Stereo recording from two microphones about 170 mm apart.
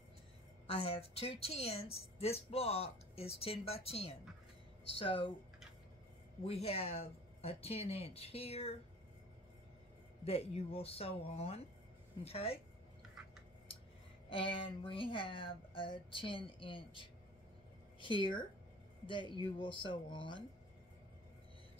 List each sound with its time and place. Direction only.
0.7 s a woman's voice: 35° left (ahead or behind)
6.4 s a woman's voice: 35° left (ahead or behind)
10.2 s a woman's voice: 35° left (ahead or behind)
14.3 s a woman's voice: 30° left (ahead or behind)